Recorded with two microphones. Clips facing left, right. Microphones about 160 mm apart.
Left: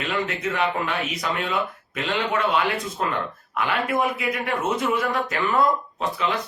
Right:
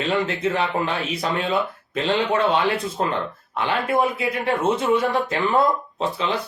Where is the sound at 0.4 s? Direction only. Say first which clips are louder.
Right 2 dB; 30° right (ahead or behind).